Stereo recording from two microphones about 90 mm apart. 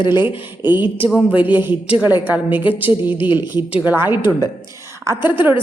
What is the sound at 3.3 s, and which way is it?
Speech, 60° left (ahead or behind).